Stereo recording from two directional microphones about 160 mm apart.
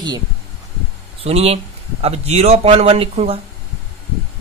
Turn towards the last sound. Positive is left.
turn(degrees=-40)  # may be behind; listen again after turning